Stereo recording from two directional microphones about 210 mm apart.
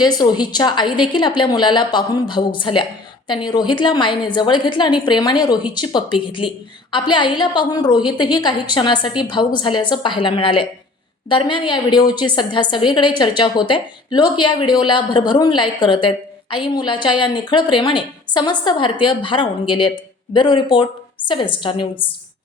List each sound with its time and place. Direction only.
0.0 s a woman's voice: 20° left (ahead or behind)